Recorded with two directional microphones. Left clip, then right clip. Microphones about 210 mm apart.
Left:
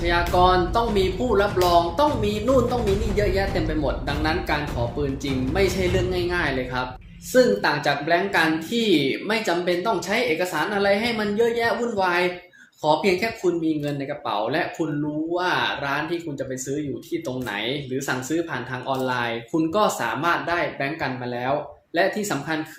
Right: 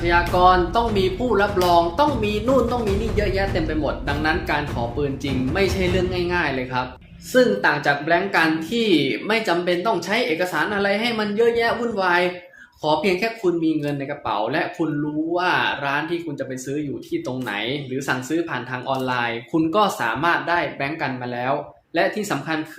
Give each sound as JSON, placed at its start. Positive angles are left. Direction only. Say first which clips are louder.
{"t": 0.0, "sound": "a woman's voice", "louder": "right 3 dB", "side_deg": -10}